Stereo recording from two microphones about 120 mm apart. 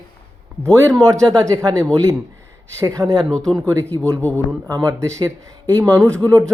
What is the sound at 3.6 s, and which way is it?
A man's voice, 25° right (ahead or behind).